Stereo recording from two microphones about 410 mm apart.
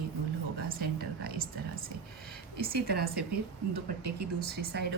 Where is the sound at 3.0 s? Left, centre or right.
Right.